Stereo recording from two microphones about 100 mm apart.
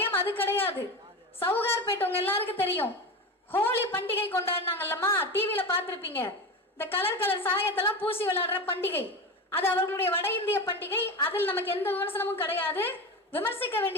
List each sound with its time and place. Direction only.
0.0 s a woman's voice: 20° left (ahead or behind)